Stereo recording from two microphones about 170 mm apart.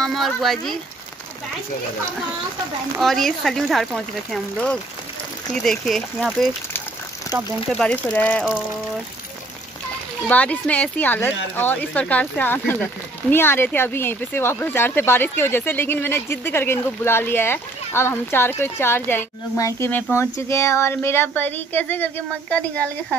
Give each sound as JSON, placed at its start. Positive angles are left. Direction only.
{"t": 0.0, "sound": "speech", "side_deg": 0}
{"t": 3.0, "sound": "speech", "side_deg": 0}
{"t": 7.7, "sound": "speech", "side_deg": 5}
{"t": 10.2, "sound": "speech", "side_deg": 10}